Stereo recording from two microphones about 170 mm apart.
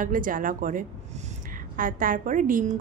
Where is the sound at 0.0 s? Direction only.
50° right (ahead or behind).